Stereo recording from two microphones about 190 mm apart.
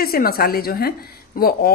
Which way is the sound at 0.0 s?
50° left (ahead or behind).